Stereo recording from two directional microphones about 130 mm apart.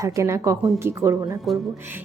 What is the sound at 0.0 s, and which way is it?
Speech, 20° right (ahead or behind).